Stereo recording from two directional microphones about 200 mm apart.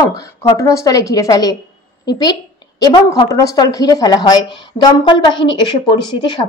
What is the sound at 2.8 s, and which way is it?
Speech, 20° left (ahead or behind).